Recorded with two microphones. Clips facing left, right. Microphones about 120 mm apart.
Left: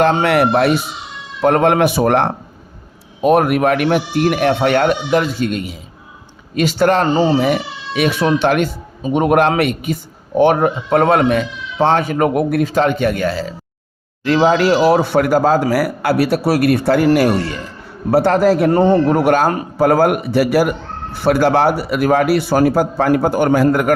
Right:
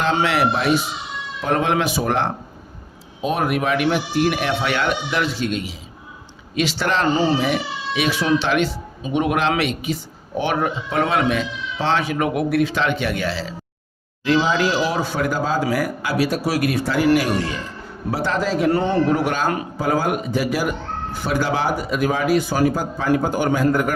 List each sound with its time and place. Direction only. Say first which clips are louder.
0.0 s a man's voice: left 6 dB; 55° left (ahead or behind)
18.7 s a man's voice: left 6 dB; 45° left (ahead or behind); by 23.9 s 65° left (ahead or behind)